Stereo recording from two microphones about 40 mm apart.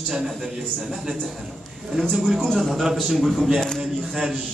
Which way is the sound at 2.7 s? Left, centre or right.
Centre.